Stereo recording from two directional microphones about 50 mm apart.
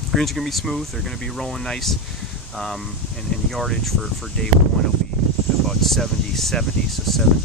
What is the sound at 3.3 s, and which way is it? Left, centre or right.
Speech, centre.